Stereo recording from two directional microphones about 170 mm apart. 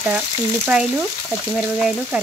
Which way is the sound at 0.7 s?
5° right (ahead or behind).